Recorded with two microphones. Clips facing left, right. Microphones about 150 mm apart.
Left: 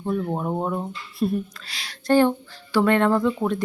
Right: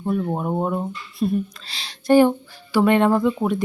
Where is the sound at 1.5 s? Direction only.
25° right (ahead or behind).